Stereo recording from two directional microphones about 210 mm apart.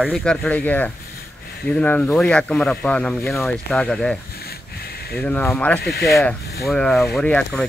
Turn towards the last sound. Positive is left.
turn(degrees=5)  # may be behind; listen again after turning